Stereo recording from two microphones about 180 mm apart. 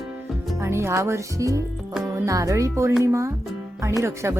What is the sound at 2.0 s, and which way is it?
Speech, 20° right (ahead or behind).